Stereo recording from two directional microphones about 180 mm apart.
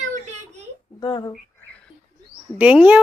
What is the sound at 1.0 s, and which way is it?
Speech, 25° left (ahead or behind).